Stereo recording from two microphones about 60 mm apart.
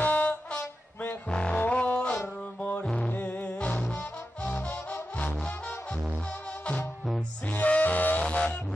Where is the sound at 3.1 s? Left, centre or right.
Left.